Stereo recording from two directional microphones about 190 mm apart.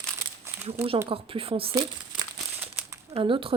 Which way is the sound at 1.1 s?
30° right (ahead or behind).